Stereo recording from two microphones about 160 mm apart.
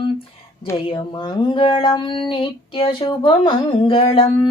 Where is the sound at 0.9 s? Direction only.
25° left (ahead or behind).